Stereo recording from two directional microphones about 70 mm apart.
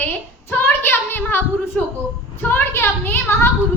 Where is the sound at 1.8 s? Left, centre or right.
Centre.